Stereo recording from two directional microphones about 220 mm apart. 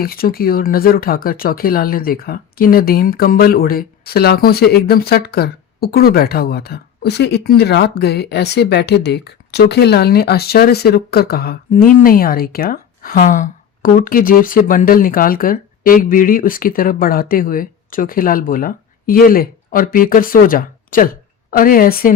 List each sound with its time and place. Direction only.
0.0 s a woman's voice: 40° left (ahead or behind)